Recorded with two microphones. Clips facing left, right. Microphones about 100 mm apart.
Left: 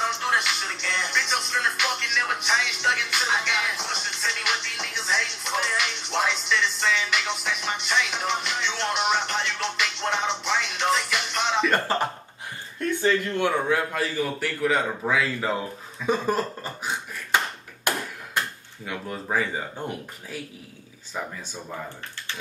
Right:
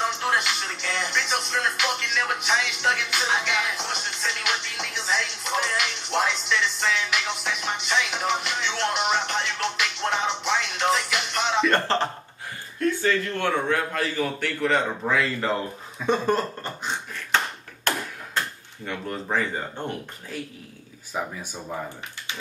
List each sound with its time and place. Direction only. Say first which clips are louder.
0.0 s music: right 1 dB; centre (ahead or behind)
13.0 s a man's voice: left 1 dB; 15° left (ahead or behind)
17.9 s a sound: even; 10° left (ahead or behind)
18.9 s speech: right 1 dB; 5° left (ahead or behind)
21.1 s speech: right 2 dB; 10° right (ahead or behind)